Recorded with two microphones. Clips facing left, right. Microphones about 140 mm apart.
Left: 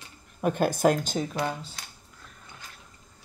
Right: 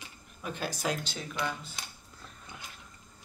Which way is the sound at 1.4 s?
30° left (ahead or behind).